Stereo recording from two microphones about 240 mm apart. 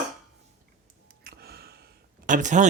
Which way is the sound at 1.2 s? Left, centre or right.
Right.